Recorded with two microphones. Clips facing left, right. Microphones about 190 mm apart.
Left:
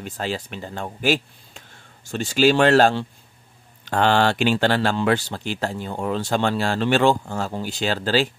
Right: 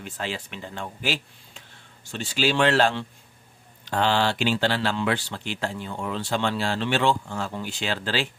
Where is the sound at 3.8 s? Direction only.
55° left (ahead or behind).